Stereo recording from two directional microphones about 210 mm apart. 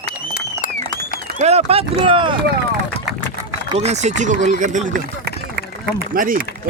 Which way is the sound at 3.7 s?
30° right (ahead or behind).